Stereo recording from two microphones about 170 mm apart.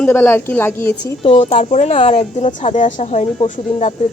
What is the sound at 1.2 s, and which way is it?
Speech, 35° left (ahead or behind).